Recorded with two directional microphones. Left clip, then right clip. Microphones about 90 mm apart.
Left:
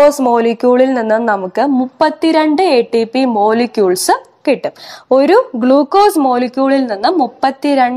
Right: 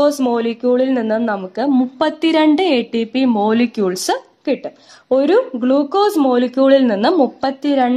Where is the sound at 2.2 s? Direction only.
40° right (ahead or behind).